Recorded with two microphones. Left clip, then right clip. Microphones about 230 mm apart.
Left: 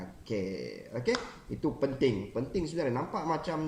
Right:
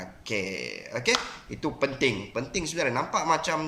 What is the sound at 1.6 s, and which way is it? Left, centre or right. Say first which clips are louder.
Speech: right 3 dB; right.